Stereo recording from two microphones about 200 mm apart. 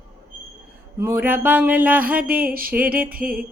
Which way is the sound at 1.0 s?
10° right (ahead or behind).